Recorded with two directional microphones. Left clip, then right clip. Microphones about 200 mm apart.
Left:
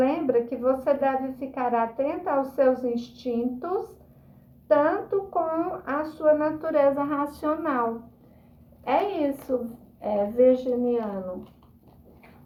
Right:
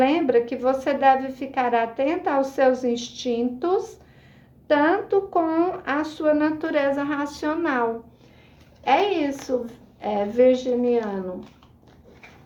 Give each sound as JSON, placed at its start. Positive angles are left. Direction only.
{"t": 0.0, "sound": "speech", "side_deg": -35}
{"t": 4.7, "sound": "speech", "side_deg": -35}
{"t": 8.8, "sound": "a woman's voice", "side_deg": -35}